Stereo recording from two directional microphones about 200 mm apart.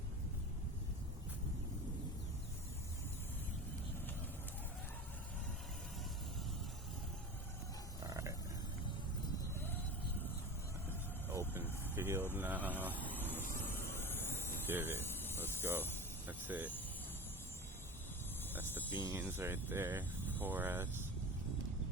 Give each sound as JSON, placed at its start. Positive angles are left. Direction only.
{"t": 8.0, "sound": "a sound", "side_deg": -15}
{"t": 11.3, "sound": "vehicle", "side_deg": -10}
{"t": 12.3, "sound": "speech", "side_deg": -10}
{"t": 13.1, "sound": "vehicle", "side_deg": 10}
{"t": 14.7, "sound": "speech", "side_deg": -10}
{"t": 15.3, "sound": "a sound", "side_deg": 10}
{"t": 16.5, "sound": "speech", "side_deg": -10}
{"t": 18.5, "sound": "speech", "side_deg": -10}